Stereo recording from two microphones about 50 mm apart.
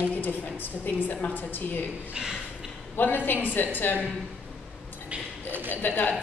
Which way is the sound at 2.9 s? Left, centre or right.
Left.